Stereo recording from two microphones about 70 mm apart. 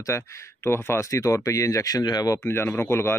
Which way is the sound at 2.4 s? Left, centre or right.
Left.